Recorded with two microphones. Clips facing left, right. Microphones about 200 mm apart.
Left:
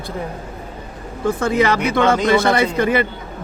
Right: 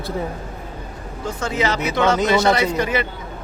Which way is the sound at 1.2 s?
55° left (ahead or behind).